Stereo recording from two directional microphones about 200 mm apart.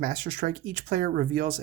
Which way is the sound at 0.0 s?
45° right (ahead or behind).